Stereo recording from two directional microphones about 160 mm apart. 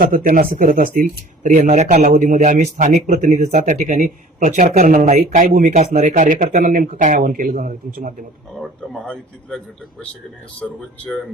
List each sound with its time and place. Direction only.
0.0 s a man's voice: 60° right (ahead or behind)
5.0 s a man's voice: 50° right (ahead or behind)
8.6 s a man's voice: centre (ahead or behind)
10.6 s speech: 5° left (ahead or behind)